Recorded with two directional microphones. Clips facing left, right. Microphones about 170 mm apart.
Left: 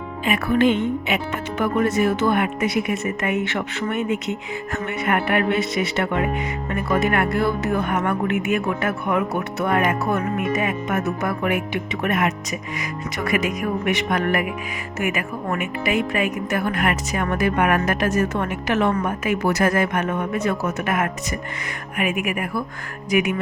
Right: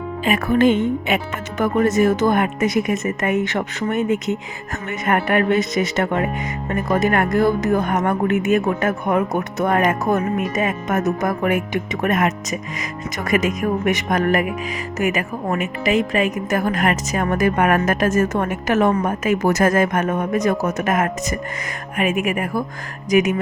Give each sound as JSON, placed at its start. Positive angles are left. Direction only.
{"t": 0.3, "sound": "a woman's voice", "side_deg": -45}
{"t": 16.5, "sound": "a woman's voice", "side_deg": -40}